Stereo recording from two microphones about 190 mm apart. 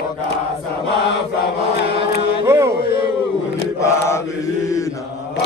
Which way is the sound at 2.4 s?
15° right (ahead or behind).